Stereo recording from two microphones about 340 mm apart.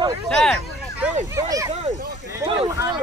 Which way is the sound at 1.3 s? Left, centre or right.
Centre.